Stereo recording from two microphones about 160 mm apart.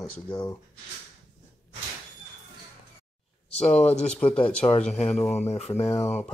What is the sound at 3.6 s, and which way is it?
Speech, 10° left (ahead or behind).